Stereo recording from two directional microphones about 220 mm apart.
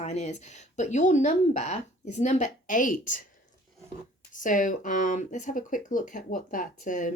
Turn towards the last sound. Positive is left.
turn(degrees=35)  # may be behind; listen again after turning